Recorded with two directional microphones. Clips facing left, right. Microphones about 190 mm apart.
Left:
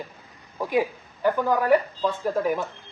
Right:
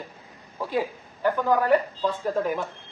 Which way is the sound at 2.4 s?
5° left (ahead or behind).